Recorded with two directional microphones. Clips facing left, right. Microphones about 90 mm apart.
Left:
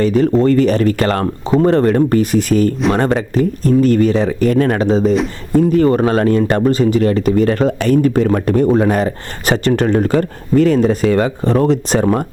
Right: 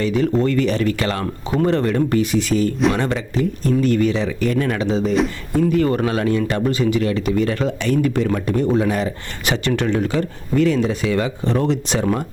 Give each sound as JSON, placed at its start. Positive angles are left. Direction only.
{"t": 0.0, "sound": "speech", "side_deg": 40}